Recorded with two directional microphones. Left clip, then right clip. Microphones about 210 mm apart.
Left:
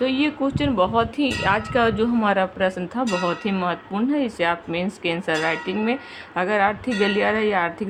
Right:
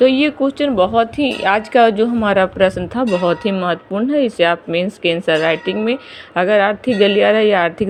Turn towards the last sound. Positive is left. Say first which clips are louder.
# right 8 dB
turn(degrees=-20)  # may be behind; listen again after turning